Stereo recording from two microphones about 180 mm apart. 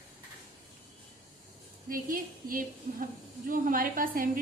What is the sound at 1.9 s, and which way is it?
A woman's voice, 50° right (ahead or behind).